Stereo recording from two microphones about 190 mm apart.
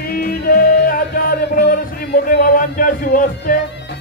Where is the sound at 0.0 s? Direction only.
55° left (ahead or behind).